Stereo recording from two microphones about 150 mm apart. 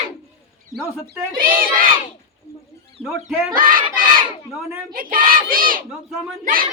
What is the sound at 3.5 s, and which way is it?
Speech, 70° right (ahead or behind).